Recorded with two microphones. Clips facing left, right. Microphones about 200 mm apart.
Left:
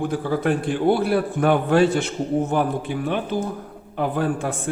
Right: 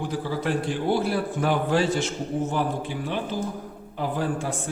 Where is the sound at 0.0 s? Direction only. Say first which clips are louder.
Left 5 dB; 55° left (ahead or behind).